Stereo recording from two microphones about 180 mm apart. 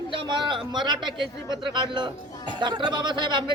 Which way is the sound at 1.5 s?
25° right (ahead or behind).